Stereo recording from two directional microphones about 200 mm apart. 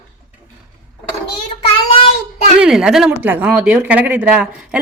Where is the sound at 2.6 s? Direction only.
5° right (ahead or behind).